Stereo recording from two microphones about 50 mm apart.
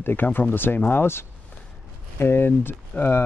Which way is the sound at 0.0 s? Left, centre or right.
Left.